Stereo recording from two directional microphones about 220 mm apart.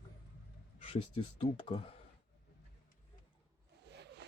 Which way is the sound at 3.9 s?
50° right (ahead or behind).